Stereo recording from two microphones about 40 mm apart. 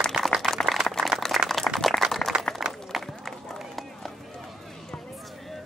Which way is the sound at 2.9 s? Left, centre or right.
Centre.